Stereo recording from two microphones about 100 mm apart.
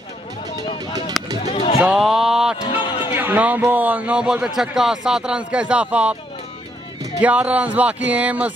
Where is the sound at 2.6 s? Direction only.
55° left (ahead or behind).